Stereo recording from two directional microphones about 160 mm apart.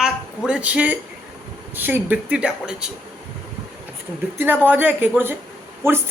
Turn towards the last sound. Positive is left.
turn(degrees=-15)  # may be behind; listen again after turning